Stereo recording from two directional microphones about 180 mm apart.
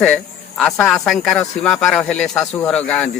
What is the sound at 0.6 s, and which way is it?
Speech, 5° left (ahead or behind).